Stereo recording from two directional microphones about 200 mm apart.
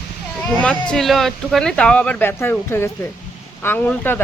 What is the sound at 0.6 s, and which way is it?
Speech, 5° left (ahead or behind).